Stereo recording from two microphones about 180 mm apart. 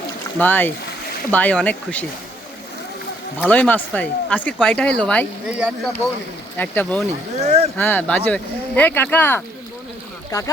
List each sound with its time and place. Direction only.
0.3 s speech: 10° left (ahead or behind)
3.5 s speech: 10° left (ahead or behind)
5.5 s speech: 5° right (ahead or behind)
6.6 s speech: 10° left (ahead or behind)
7.1 s speech: 35° right (ahead or behind)
7.8 s speech: 10° left (ahead or behind)